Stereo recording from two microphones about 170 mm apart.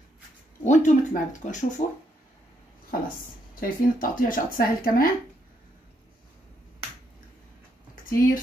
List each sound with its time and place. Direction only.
0.7 s speech: 45° left (ahead or behind)
2.9 s speech: 55° left (ahead or behind)
7.9 s a sound: 55° left (ahead or behind)